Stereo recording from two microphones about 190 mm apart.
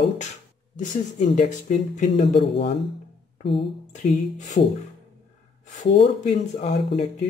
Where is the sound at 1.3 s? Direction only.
40° left (ahead or behind).